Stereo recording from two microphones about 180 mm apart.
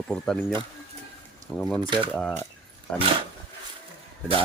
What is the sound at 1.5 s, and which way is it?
Speech, 10° left (ahead or behind).